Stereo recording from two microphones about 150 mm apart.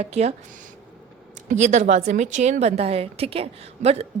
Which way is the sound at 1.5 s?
50° right (ahead or behind).